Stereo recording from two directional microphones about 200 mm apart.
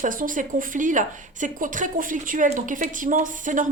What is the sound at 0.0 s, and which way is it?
A woman's voice, 40° right (ahead or behind).